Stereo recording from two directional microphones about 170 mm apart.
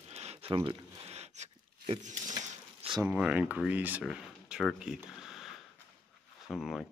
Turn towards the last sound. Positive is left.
turn(degrees=0)  # may be behind; listen again after turning